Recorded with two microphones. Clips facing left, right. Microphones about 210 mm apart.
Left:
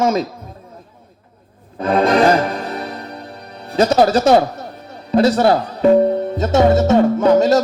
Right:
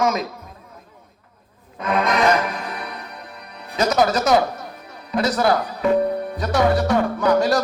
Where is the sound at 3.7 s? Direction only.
30° left (ahead or behind).